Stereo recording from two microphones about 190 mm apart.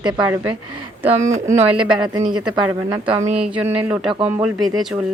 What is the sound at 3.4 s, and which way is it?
Speech, 5° right (ahead or behind).